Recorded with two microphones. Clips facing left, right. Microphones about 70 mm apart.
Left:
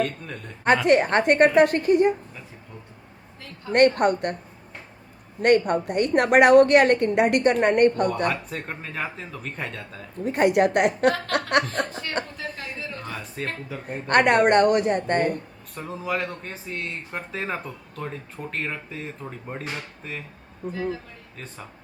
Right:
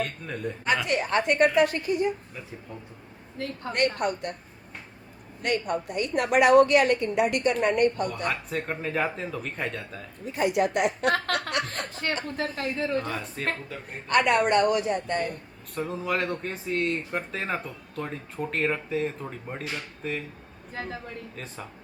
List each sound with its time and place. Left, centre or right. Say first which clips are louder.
0.0 s speech: left 3 dB; centre
0.9 s a woman's voice: left 8 dB; left
3.3 s a woman's voice: right 10 dB; right
3.7 s a woman's voice: left 8 dB; left
5.4 s a woman's voice: left 8 dB; left
8.3 s speech: even; centre
10.2 s a woman's voice: left 5 dB; left
12.4 s a woman's voice: right 5 dB; right
13.0 s speech: right 2 dB; centre
14.1 s a woman's voice: left 4 dB; left
15.7 s speech: even; centre
21.3 s speech: right 1 dB; centre